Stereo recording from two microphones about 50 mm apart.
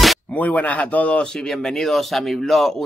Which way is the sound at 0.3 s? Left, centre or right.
Left.